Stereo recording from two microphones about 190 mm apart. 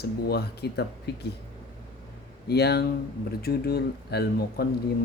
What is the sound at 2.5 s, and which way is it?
Speech, 60° left (ahead or behind).